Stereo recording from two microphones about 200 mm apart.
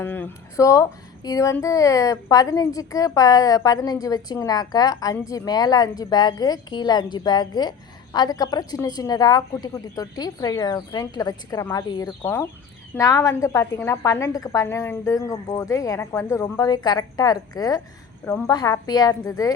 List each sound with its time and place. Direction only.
0.0 s female singing: 10° left (ahead or behind)
13.0 s a woman's voice: 15° left (ahead or behind)
18.3 s female singing: 15° left (ahead or behind)